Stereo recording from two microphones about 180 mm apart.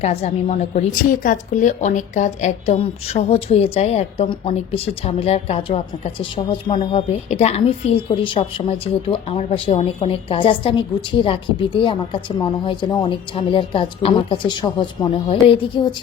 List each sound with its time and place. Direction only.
0.0 s a woman's voice: 35° left (ahead or behind)